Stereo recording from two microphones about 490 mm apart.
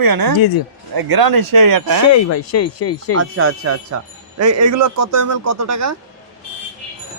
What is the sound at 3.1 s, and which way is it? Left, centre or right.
Speech, right.